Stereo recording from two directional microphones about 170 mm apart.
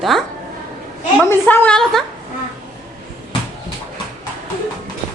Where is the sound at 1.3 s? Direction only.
10° left (ahead or behind).